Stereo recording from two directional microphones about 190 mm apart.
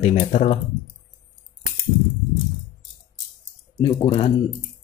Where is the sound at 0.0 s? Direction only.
35° left (ahead or behind).